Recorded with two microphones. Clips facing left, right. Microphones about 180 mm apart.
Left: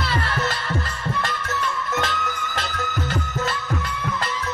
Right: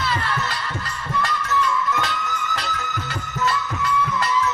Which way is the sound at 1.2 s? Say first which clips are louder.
Right 3 dB; 50° left (ahead or behind).